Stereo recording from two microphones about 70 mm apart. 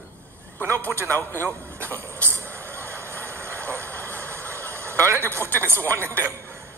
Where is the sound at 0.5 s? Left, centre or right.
Left.